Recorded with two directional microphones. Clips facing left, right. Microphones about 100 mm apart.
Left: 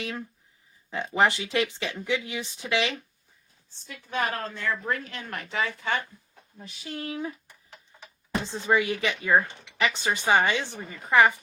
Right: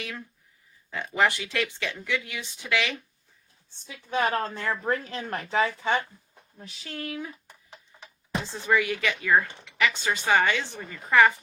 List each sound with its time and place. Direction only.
0.9 s speech: 20° left (ahead or behind)
4.1 s speech: 30° right (ahead or behind)
6.6 s speech: centre (ahead or behind)
6.8 s speech: 20° left (ahead or behind)
8.4 s a woman's voice: 20° left (ahead or behind)